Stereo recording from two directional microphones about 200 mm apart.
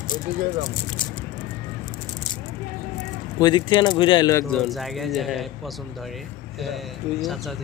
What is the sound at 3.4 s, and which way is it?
Speech, 25° left (ahead or behind).